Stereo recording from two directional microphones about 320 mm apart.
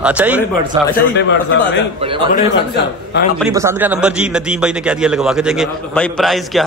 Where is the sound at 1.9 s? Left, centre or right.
Centre.